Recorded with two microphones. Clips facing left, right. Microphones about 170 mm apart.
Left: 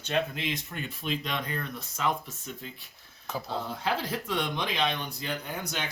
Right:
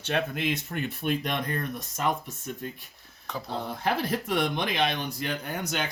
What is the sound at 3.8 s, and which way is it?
Speech, 65° right (ahead or behind).